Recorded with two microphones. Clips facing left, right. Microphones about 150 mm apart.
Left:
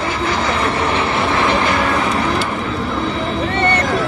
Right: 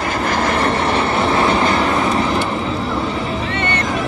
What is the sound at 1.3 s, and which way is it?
Vehicle, 30° right (ahead or behind).